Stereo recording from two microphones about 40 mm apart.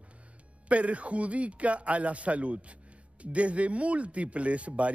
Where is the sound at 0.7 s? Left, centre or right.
Right.